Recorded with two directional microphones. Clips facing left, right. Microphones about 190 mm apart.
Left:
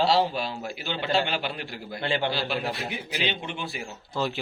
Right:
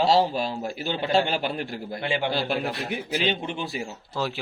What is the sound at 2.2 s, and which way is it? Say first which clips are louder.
A man's voice: right 2 dB; 50° right (ahead or behind).